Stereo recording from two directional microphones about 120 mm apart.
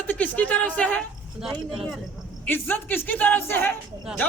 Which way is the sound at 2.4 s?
15° left (ahead or behind).